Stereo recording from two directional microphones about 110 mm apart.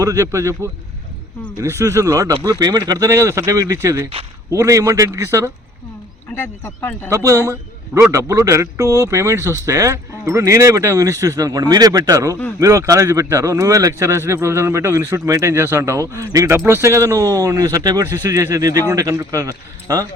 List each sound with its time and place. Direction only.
0.0 s speech: 30° right (ahead or behind)
6.3 s speech: 20° left (ahead or behind)
7.1 s speech: 30° right (ahead or behind)